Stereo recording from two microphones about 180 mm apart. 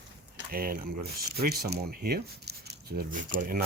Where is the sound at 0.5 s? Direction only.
55° right (ahead or behind).